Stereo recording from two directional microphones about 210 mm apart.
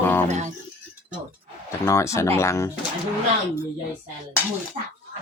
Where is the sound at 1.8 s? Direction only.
15° left (ahead or behind).